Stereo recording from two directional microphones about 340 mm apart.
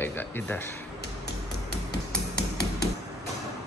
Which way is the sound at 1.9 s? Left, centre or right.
Left.